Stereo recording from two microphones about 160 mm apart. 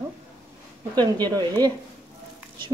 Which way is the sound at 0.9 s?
25° right (ahead or behind).